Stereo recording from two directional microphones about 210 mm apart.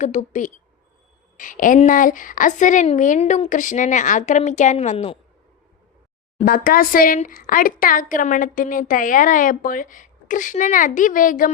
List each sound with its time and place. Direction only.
0.0 s speech: 35° left (ahead or behind)
6.4 s speech: 40° left (ahead or behind)